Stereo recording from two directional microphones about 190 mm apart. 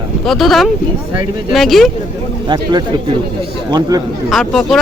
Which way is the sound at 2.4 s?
25° right (ahead or behind).